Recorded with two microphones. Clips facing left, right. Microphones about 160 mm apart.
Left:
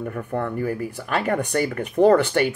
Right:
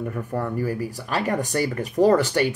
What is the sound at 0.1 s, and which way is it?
Speech, 10° right (ahead or behind).